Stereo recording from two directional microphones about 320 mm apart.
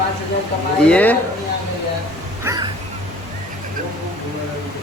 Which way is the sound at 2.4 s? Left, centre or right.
Centre.